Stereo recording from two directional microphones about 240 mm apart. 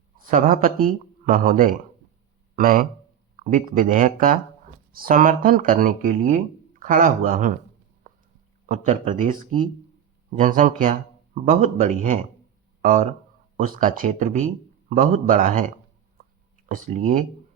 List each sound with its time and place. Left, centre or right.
0.2 s speech: right
8.1 s a sound: right
8.6 s a man's voice: right
16.6 s speech: right